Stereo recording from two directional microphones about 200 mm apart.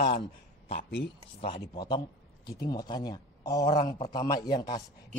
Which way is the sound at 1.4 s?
25° left (ahead or behind).